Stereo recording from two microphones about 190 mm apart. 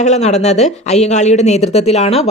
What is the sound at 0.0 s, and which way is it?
Speech, 35° left (ahead or behind).